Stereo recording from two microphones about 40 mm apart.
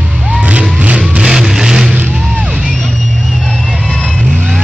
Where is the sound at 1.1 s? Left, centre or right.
Centre.